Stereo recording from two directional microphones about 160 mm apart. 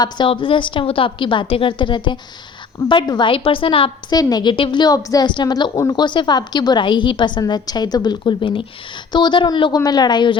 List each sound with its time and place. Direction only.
0.0 s a woman's voice: 30° left (ahead or behind)